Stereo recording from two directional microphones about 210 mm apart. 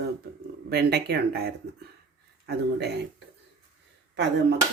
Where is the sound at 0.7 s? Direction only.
50° right (ahead or behind).